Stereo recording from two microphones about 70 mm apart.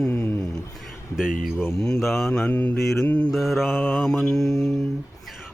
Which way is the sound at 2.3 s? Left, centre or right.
Centre.